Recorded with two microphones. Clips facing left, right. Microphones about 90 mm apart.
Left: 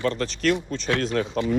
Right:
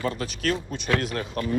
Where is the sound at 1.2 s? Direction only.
20° left (ahead or behind).